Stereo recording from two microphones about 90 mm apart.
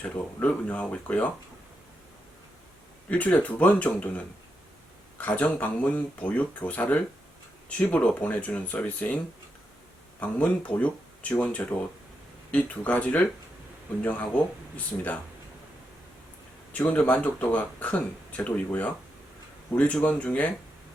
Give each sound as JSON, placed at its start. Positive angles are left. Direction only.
{"t": 0.0, "sound": "speech", "side_deg": 15}
{"t": 3.1, "sound": "speech", "side_deg": 15}
{"t": 5.1, "sound": "speech", "side_deg": 15}
{"t": 10.2, "sound": "speech", "side_deg": 15}
{"t": 16.7, "sound": "speech", "side_deg": 15}